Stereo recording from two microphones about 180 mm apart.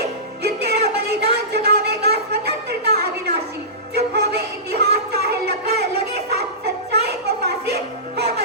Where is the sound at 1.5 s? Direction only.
65° right (ahead or behind).